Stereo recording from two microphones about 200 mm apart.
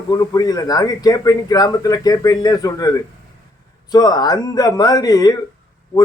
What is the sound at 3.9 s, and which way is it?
A man's voice, 20° left (ahead or behind).